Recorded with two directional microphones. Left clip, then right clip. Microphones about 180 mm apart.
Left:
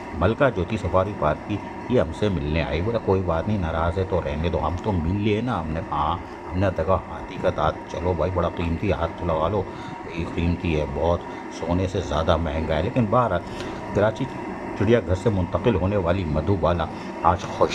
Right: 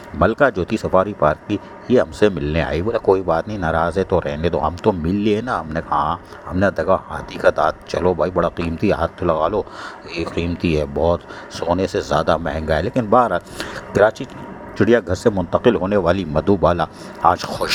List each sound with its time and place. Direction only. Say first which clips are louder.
0.2 s speech: right 5 dB; 35° right (ahead or behind)